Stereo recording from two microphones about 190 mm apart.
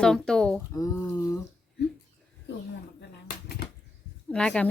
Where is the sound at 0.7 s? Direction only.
15° left (ahead or behind).